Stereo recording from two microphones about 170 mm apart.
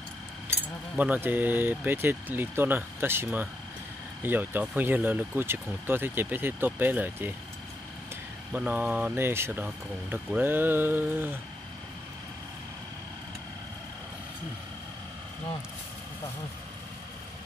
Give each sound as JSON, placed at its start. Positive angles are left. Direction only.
{"t": 0.9, "sound": "speech", "side_deg": -10}
{"t": 8.5, "sound": "speech", "side_deg": -10}